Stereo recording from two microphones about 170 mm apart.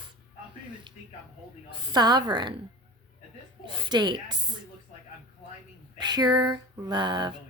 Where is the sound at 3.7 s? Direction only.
25° right (ahead or behind).